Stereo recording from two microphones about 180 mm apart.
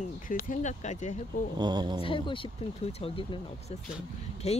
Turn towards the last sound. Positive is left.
turn(degrees=35)  # may be behind; listen again after turning